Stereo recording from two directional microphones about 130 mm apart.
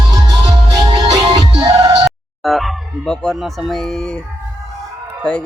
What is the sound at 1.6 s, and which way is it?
Music, 30° right (ahead or behind).